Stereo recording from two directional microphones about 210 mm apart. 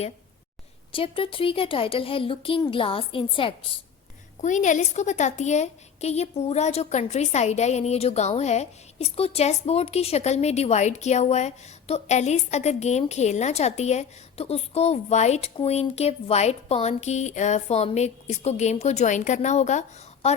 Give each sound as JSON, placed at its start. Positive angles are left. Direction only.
{"t": 0.9, "sound": "a woman's voice", "side_deg": 25}
{"t": 4.4, "sound": "a woman's voice", "side_deg": 35}